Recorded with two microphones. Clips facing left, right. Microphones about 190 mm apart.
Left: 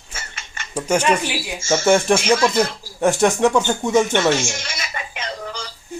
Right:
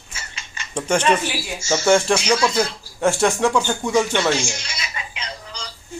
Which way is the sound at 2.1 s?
50° left (ahead or behind).